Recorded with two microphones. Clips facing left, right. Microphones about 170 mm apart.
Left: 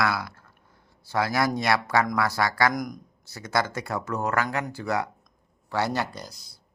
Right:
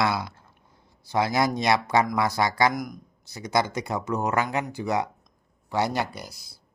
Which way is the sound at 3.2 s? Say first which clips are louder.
Right 2 dB; 15° right (ahead or behind).